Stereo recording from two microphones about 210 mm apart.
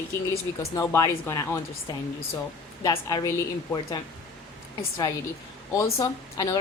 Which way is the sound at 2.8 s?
20° left (ahead or behind).